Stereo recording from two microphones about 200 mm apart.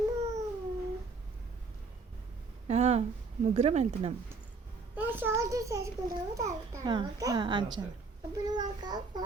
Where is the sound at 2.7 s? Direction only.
30° right (ahead or behind).